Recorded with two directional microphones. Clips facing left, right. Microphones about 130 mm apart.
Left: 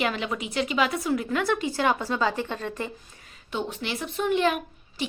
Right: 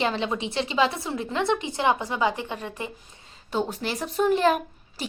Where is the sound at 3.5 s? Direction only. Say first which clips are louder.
Right 3 dB; 35° right (ahead or behind).